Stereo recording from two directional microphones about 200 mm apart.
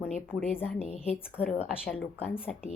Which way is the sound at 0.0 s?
5° left (ahead or behind).